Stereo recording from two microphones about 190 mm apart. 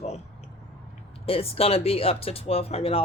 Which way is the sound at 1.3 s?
30° left (ahead or behind).